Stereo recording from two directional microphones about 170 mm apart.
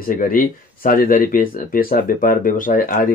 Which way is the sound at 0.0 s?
55° left (ahead or behind).